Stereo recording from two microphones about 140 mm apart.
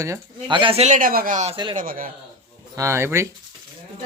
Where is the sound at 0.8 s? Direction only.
70° right (ahead or behind).